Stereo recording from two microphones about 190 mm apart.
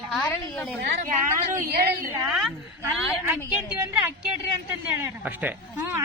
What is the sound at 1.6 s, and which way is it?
Speech, 50° right (ahead or behind).